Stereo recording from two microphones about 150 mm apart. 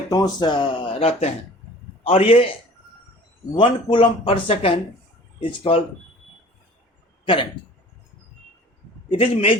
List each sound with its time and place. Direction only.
0.1 s speech: 30° left (ahead or behind)
3.5 s speech: 30° left (ahead or behind)
7.3 s speech: 30° left (ahead or behind)
9.0 s a man's voice: 40° left (ahead or behind)